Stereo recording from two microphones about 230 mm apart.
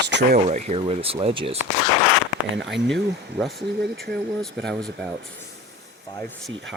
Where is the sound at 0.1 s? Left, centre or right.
Right.